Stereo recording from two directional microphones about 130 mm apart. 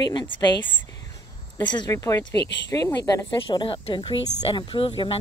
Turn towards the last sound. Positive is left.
turn(degrees=45)  # may be behind; listen again after turning